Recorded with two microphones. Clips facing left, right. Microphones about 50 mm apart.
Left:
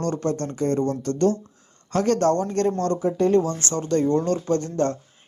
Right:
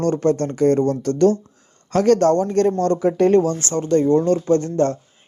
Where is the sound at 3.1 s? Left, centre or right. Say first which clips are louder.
Right 4 dB; right.